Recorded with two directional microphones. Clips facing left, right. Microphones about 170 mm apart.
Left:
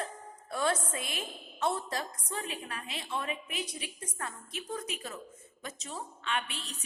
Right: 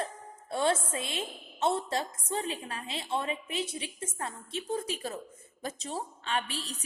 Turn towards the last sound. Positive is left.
turn(degrees=-35)  # may be behind; listen again after turning